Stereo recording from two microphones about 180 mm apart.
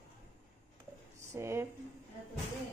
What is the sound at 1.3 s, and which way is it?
Speech, 15° right (ahead or behind).